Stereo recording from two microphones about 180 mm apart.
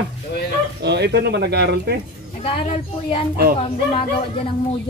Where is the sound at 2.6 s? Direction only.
35° left (ahead or behind).